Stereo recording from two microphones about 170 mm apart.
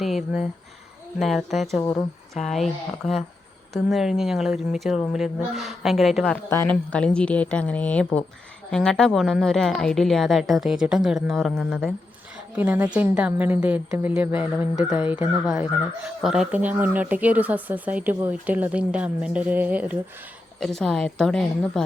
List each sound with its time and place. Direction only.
0.0 s a woman's voice: centre (ahead or behind)
1.8 s speech: 20° left (ahead or behind)
2.3 s a woman's voice: centre (ahead or behind)
12.5 s a woman's voice: 10° right (ahead or behind)
20.6 s a woman's voice: centre (ahead or behind)